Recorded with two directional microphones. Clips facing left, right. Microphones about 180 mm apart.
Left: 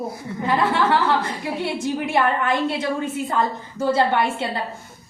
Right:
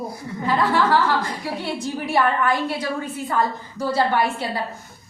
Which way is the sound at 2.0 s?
20° left (ahead or behind).